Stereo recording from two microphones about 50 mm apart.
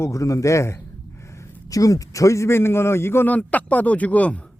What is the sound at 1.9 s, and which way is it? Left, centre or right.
Speech, left.